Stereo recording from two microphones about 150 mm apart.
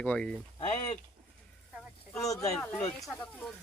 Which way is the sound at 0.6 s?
45° left (ahead or behind).